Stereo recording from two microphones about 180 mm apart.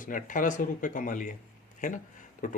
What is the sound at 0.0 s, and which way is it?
Speech, 45° left (ahead or behind).